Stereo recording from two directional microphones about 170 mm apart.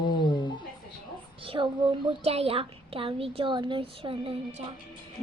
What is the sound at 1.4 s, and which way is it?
A child's voice, 30° right (ahead or behind).